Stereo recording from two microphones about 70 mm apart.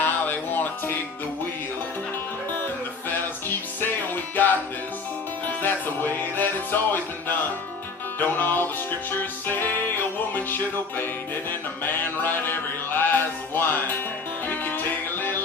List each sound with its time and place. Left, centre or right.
0.0 s music: left
3.1 s music: left